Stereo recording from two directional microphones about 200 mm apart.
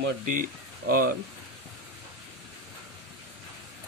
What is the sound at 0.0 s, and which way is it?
Speech, 45° right (ahead or behind).